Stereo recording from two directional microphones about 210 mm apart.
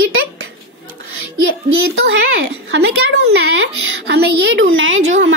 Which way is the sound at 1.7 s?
65° right (ahead or behind).